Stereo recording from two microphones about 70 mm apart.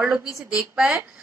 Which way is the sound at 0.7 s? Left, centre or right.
Centre.